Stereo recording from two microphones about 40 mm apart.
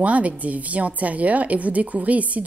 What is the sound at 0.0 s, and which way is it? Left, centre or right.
A woman's voice, right.